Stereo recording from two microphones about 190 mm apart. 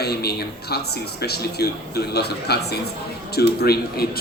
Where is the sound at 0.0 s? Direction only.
55° left (ahead or behind).